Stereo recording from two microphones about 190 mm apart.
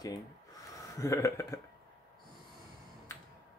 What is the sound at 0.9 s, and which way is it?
Speech, 15° left (ahead or behind).